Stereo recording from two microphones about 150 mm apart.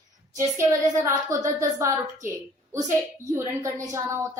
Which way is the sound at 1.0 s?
20° right (ahead or behind).